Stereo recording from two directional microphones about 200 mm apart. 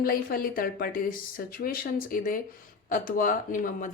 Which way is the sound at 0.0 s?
45° left (ahead or behind).